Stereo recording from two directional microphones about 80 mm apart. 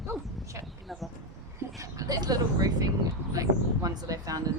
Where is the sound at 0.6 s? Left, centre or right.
Centre.